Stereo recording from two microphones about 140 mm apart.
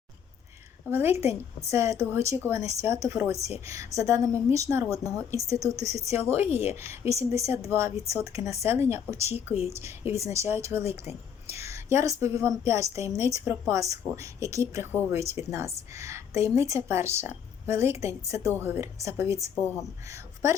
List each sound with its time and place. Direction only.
0.9 s a woman's voice: 15° right (ahead or behind)
19.5 s speech: 15° left (ahead or behind)
20.1 s speech: 20° right (ahead or behind)